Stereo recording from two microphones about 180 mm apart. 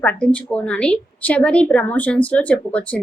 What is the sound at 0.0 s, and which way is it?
A woman's voice, 5° left (ahead or behind).